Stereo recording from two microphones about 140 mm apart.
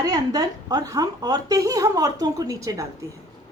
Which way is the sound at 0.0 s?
25° right (ahead or behind).